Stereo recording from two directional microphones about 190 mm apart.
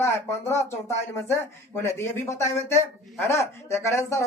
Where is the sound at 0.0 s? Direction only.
15° left (ahead or behind).